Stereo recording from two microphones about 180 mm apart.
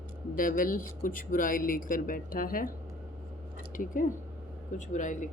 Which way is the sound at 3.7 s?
50° left (ahead or behind).